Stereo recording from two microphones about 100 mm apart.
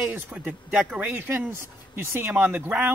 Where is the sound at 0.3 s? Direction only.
15° right (ahead or behind).